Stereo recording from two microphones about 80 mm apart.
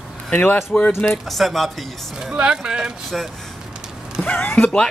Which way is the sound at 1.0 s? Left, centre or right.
Centre.